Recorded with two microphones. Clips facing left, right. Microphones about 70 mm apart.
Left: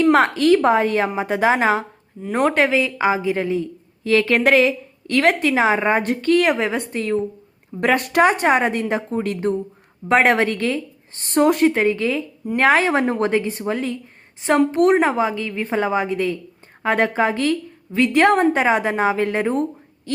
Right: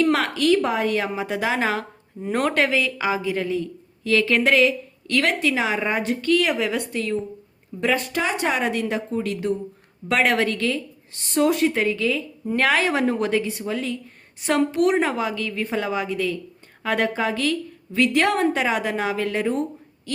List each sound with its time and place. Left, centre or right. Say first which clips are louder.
0.0 s speech: left 5 dB; left
2.3 s a woman's voice: left 4 dB; centre; by 7.2 s left
7.8 s speech: left 7 dB; left
14.9 s a woman's voice: left 4 dB; left